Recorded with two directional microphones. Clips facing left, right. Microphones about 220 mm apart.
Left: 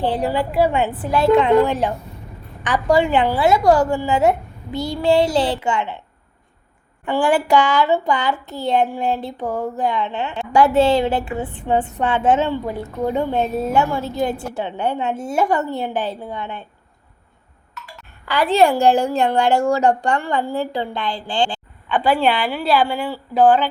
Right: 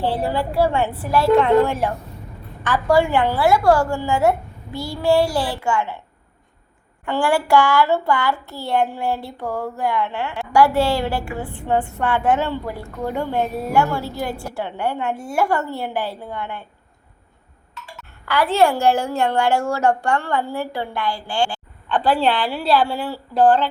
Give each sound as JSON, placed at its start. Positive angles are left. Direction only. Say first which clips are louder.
{"t": 0.0, "sound": "a woman's voice", "louder": "left 2 dB", "side_deg": 15}
{"t": 7.0, "sound": "speech", "louder": "left 2 dB", "side_deg": 15}
{"t": 17.8, "sound": "music", "louder": "even", "side_deg": -30}
{"t": 18.3, "sound": "a woman's voice", "louder": "left 2 dB", "side_deg": 15}
{"t": 21.8, "sound": "speech", "louder": "left 1 dB", "side_deg": 5}